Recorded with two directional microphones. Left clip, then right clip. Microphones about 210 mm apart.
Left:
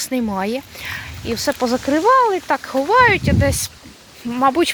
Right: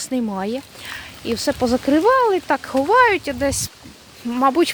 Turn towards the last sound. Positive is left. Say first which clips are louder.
# left 1 dB
turn(degrees=-10)  # may be behind; listen again after turning